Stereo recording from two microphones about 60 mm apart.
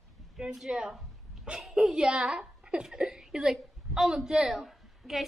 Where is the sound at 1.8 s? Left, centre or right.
Centre.